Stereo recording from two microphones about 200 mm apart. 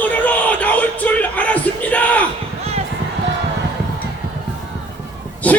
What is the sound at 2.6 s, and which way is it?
Basketball bounce, 30° right (ahead or behind).